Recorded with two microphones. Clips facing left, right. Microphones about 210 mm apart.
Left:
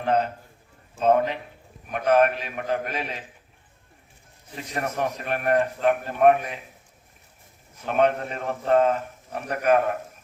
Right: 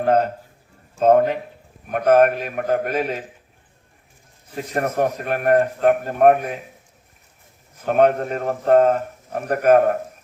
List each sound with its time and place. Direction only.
0.0 s a man's voice: 45° right (ahead or behind)
4.5 s a man's voice: 45° right (ahead or behind)
7.9 s a man's voice: 45° right (ahead or behind)